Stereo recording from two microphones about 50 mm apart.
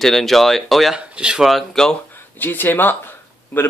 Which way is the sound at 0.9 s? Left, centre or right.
Centre.